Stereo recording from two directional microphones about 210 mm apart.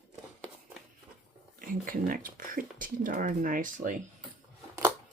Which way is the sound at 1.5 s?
40° right (ahead or behind).